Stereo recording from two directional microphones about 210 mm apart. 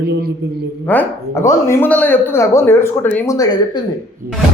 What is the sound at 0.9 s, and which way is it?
Speech, 10° left (ahead or behind).